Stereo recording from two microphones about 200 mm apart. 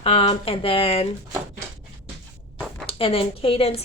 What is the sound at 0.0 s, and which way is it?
A woman's voice, 30° left (ahead or behind).